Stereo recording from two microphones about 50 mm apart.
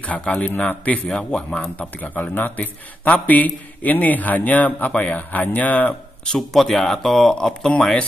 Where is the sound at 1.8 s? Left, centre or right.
Left.